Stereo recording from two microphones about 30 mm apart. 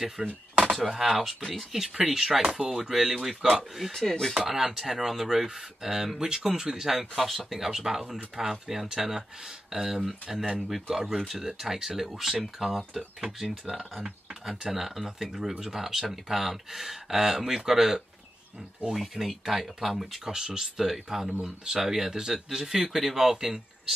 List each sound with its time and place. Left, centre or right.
0.2 s speech: centre
0.7 s speech: centre
3.9 s speech: centre
4.4 s speech: centre
20.2 s speech: centre
20.7 s speech: centre